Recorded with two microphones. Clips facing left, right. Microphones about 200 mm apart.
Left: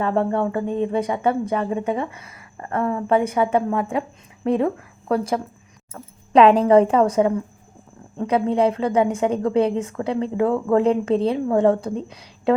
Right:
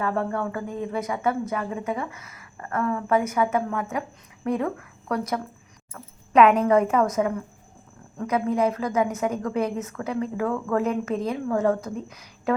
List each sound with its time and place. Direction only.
0.0 s a woman's voice: 25° left (ahead or behind)